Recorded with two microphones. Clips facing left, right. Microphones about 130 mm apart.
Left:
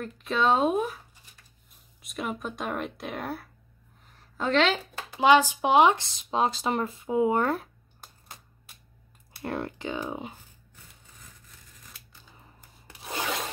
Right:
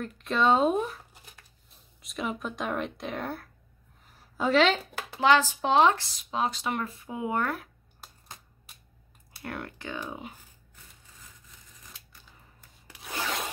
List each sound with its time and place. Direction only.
0.0 s speech: centre (ahead or behind)
2.0 s speech: centre (ahead or behind)
4.7 s speech: 15° left (ahead or behind)
9.4 s speech: 25° left (ahead or behind)
12.8 s rub: 25° left (ahead or behind)